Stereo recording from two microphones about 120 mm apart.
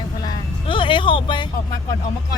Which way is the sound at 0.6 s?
45° left (ahead or behind).